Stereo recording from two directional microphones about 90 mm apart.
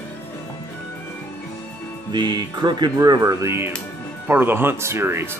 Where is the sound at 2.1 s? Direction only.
55° right (ahead or behind).